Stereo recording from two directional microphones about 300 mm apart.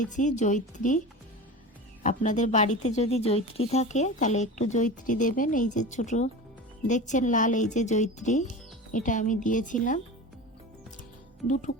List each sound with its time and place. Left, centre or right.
0.0 s speech: left
2.0 s speech: left
11.4 s speech: left